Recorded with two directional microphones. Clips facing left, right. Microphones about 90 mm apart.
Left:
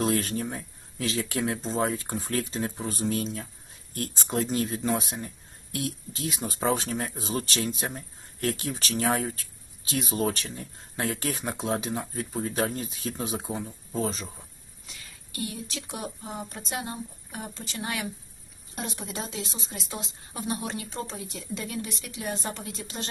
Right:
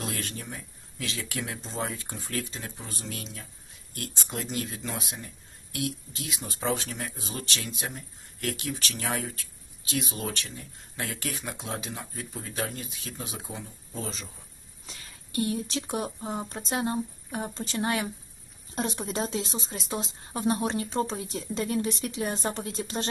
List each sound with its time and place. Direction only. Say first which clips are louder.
0.0 s speech: left 9 dB; 35° left (ahead or behind)
14.8 s a woman's voice: right 1 dB; 35° right (ahead or behind)